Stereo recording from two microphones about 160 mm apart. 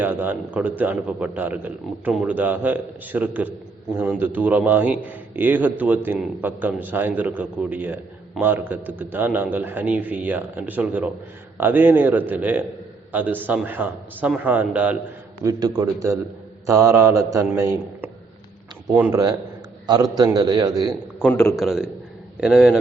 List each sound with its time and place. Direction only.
0.0 s a man's voice: 10° right (ahead or behind)
15.4 s a man's voice: 25° right (ahead or behind)
18.9 s a man's voice: 10° right (ahead or behind)
19.9 s a man's voice: 25° right (ahead or behind)
21.2 s a man's voice: 5° left (ahead or behind)